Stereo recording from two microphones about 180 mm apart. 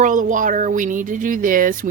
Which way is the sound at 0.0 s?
45° right (ahead or behind).